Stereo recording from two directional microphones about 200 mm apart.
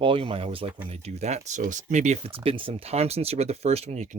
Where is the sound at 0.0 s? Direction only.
25° right (ahead or behind).